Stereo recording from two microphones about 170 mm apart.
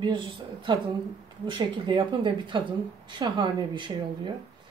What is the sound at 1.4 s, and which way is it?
Speech, 30° right (ahead or behind).